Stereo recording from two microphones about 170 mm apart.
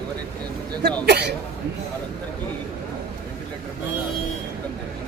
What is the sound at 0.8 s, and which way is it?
Speech, 75° right (ahead or behind).